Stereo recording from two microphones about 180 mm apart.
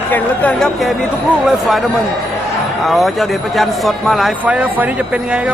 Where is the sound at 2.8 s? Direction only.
Centre (ahead or behind).